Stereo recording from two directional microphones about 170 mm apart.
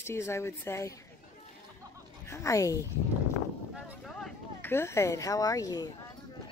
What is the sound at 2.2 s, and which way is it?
Speech, 15° left (ahead or behind).